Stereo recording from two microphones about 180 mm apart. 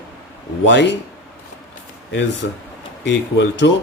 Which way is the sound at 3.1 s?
90° left.